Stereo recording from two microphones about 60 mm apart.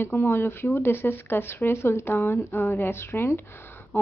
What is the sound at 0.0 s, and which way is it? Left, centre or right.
Speech, left.